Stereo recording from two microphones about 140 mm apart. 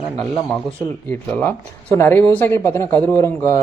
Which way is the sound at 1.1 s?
15° left (ahead or behind).